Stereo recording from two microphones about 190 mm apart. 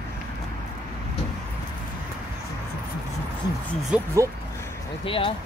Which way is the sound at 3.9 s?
15° right (ahead or behind).